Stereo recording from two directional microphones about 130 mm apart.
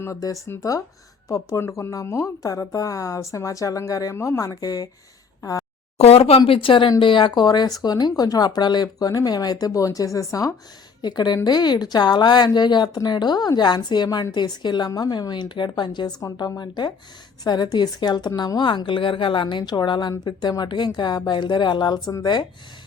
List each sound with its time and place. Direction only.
0.0 s speech: 25° left (ahead or behind)
5.4 s a sound: 25° left (ahead or behind)
6.0 s speech: 50° left (ahead or behind)
6.4 s speech: 40° left (ahead or behind)